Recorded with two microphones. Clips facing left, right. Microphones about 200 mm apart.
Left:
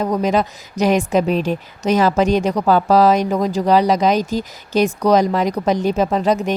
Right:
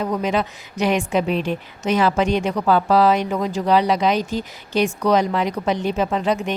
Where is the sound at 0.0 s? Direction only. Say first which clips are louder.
Left 4 dB; 40° left (ahead or behind).